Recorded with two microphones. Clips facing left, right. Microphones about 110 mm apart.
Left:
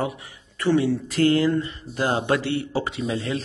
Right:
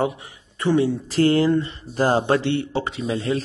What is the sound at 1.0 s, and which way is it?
Speech, 35° right (ahead or behind).